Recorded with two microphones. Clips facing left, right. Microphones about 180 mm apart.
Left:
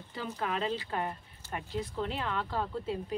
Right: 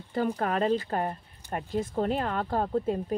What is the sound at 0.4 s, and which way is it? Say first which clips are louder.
Speech: right 3 dB; 50° right (ahead or behind).